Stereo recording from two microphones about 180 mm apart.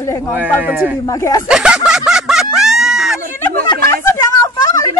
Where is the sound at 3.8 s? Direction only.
15° left (ahead or behind).